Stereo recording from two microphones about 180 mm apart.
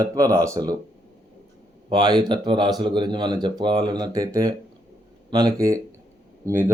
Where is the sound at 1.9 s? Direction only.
25° right (ahead or behind).